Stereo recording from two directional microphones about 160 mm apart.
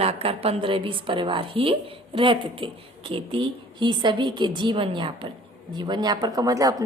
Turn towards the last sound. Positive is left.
turn(degrees=-20)  # may be behind; listen again after turning